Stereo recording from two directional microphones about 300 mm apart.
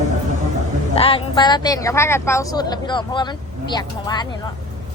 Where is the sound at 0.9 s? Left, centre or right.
Centre.